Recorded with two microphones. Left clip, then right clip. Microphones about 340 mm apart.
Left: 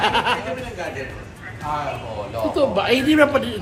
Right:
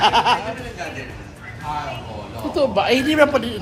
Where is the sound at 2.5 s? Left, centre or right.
Centre.